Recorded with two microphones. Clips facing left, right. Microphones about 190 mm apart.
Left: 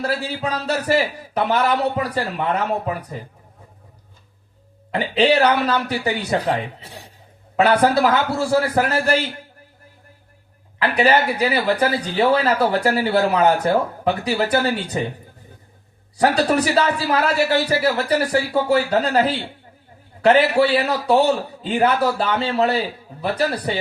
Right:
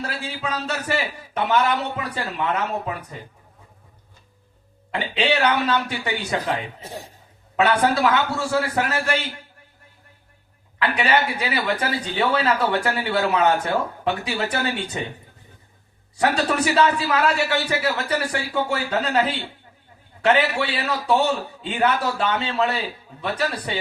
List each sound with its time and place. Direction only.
0.0 s a man's voice: 35° left (ahead or behind)
4.9 s a man's voice: 35° left (ahead or behind)
7.5 s a man's voice: 35° left (ahead or behind)
10.8 s a man's voice: 35° left (ahead or behind)
16.1 s a man's voice: 35° left (ahead or behind)